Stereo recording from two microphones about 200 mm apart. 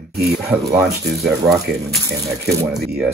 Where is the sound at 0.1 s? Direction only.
55° right (ahead or behind).